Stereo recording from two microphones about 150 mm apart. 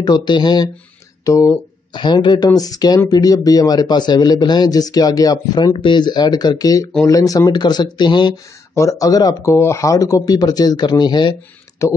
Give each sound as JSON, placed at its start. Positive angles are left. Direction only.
{"t": 0.0, "sound": "a man's voice", "side_deg": 30}
{"t": 1.2, "sound": "a sound", "side_deg": 20}
{"t": 2.0, "sound": "a man's voice", "side_deg": 30}
{"t": 11.8, "sound": "a man's voice", "side_deg": 20}